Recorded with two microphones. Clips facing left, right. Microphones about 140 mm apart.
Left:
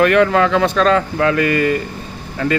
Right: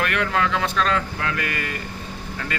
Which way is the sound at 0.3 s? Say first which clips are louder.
Left 8 dB; 90° left.